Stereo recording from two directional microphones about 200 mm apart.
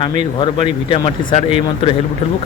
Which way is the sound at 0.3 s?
25° left (ahead or behind).